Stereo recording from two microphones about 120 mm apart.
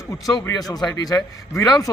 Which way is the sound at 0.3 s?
30° left (ahead or behind).